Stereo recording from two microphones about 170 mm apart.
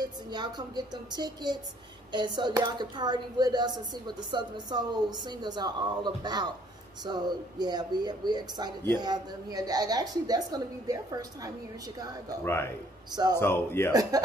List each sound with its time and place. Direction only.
0.0 s speech: 25° right (ahead or behind)
12.4 s speech: 15° left (ahead or behind)
13.1 s speech: 25° right (ahead or behind)
13.4 s speech: 15° left (ahead or behind)